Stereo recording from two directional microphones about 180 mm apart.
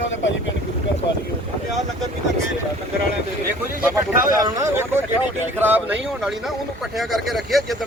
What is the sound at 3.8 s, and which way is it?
Speech, 10° right (ahead or behind).